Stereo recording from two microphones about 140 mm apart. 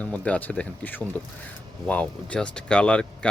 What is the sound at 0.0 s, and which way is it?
Speech, 10° left (ahead or behind).